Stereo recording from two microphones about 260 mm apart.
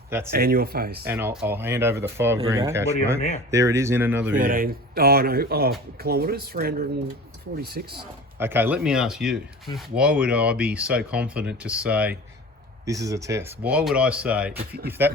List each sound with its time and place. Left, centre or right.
0.3 s speech: right
1.0 s speech: centre
4.4 s speech: right
8.4 s speech: centre